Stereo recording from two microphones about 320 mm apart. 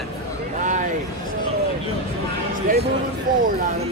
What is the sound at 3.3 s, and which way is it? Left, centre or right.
Speech, right.